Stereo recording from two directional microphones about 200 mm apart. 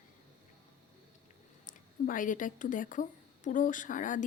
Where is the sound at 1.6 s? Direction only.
40° left (ahead or behind).